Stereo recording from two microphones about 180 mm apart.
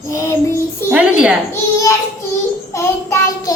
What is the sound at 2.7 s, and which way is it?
Child singing, 15° left (ahead or behind).